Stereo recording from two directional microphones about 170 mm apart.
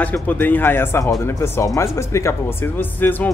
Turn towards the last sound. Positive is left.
turn(degrees=10)  # may be behind; listen again after turning